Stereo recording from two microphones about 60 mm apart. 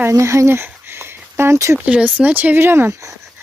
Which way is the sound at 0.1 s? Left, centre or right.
Right.